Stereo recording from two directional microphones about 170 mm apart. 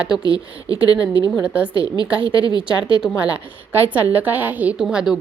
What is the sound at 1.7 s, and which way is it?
Speech, 30° right (ahead or behind).